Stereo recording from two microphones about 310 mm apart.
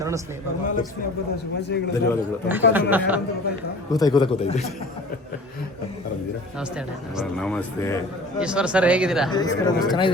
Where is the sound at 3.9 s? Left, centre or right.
Centre.